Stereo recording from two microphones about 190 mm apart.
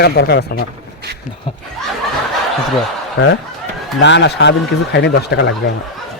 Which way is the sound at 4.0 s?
65° left (ahead or behind).